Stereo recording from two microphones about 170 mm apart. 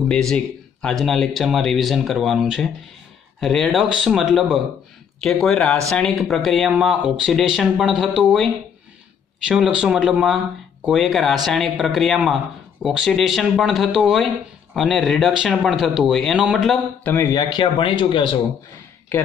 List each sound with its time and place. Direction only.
0.1 s speech: 5° left (ahead or behind)
9.5 s speech: 5° right (ahead or behind)
17.0 s speech: 15° left (ahead or behind); by 18.3 s 30° left (ahead or behind)